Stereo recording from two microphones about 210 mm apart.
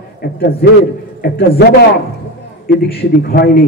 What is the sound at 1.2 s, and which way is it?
Speech, 55° left (ahead or behind).